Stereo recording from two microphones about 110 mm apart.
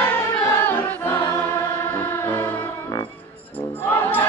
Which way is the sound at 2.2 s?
20° left (ahead or behind).